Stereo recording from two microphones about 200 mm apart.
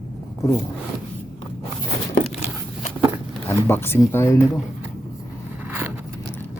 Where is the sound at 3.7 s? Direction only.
10° left (ahead or behind).